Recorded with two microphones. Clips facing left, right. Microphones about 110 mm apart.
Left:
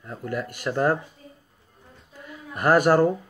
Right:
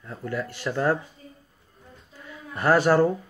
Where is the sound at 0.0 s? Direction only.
25° left (ahead or behind).